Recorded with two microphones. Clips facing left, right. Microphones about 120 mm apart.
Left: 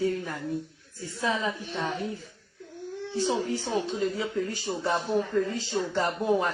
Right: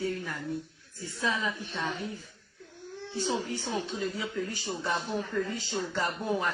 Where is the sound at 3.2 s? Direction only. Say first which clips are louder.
Left 4 dB; 25° left (ahead or behind).